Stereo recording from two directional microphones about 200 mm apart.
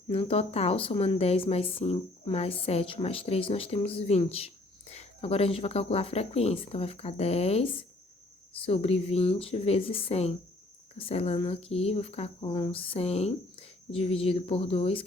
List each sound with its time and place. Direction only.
0.1 s speech: 30° left (ahead or behind)